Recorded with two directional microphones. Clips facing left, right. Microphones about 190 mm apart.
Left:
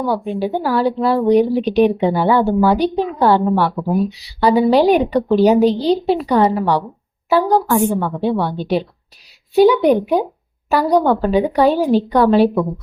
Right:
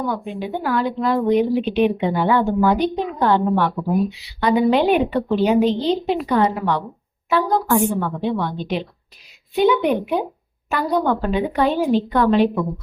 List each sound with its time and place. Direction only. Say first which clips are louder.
0.0 s speech: left 5 dB; 35° left (ahead or behind)